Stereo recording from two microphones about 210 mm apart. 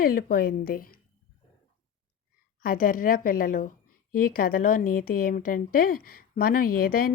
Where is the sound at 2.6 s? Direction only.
40° left (ahead or behind).